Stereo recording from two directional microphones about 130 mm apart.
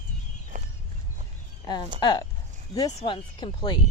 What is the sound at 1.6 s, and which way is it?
Speech, 35° left (ahead or behind).